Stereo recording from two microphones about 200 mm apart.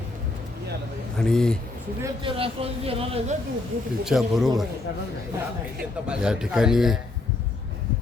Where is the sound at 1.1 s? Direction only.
5° left (ahead or behind).